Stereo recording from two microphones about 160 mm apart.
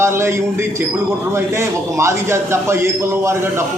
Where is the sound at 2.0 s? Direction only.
15° right (ahead or behind).